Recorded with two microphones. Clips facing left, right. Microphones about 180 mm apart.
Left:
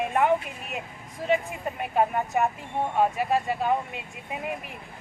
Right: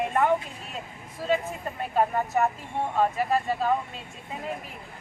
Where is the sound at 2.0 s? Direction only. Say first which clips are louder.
Even; 15° left (ahead or behind).